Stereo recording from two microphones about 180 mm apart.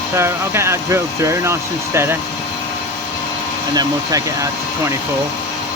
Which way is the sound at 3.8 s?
20° right (ahead or behind).